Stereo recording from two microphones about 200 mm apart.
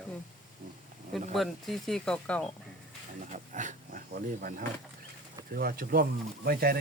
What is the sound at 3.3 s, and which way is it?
Pig, 40° right (ahead or behind).